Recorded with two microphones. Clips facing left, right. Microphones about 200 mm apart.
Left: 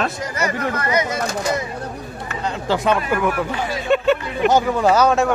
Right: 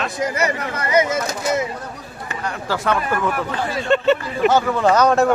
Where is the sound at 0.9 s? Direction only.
25° right (ahead or behind).